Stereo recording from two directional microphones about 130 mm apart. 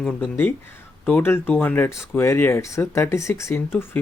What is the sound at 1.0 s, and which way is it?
Speech, 15° left (ahead or behind).